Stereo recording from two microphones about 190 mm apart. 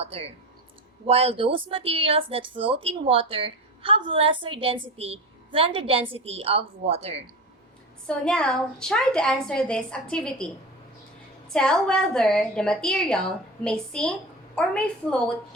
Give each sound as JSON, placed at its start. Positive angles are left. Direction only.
{"t": 0.0, "sound": "a woman's voice", "side_deg": -30}
{"t": 8.0, "sound": "a woman's voice", "side_deg": 5}
{"t": 11.5, "sound": "a woman's voice", "side_deg": 5}